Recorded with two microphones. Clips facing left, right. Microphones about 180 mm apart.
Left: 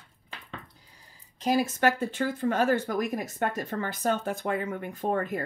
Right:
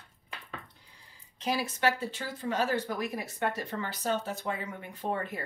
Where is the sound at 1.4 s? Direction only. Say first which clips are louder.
Left 5 dB; 45° left (ahead or behind).